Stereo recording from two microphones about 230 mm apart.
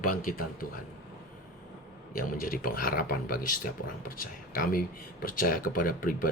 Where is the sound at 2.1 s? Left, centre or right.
Left.